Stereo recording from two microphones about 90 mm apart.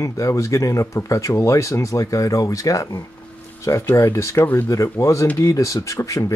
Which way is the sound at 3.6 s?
30° left (ahead or behind).